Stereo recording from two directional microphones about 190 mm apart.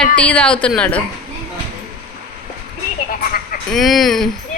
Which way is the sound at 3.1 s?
50° left (ahead or behind).